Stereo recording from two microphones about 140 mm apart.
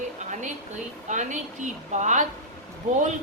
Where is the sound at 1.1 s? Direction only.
60° right (ahead or behind).